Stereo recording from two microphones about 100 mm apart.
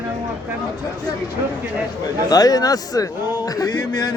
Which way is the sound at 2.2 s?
40° left (ahead or behind).